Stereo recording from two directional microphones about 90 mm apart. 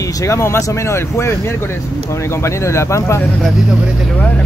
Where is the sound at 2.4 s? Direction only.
30° left (ahead or behind).